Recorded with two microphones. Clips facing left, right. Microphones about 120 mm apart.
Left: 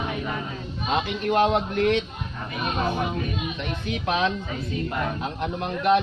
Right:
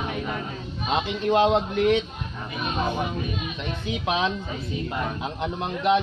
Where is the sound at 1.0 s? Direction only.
20° right (ahead or behind).